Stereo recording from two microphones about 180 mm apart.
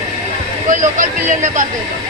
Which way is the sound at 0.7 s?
45° right (ahead or behind).